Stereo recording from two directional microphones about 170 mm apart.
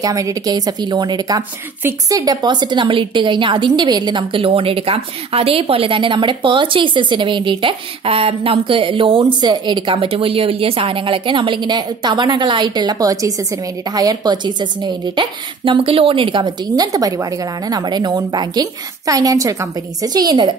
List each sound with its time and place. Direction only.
0.0 s a woman's voice: 20° right (ahead or behind)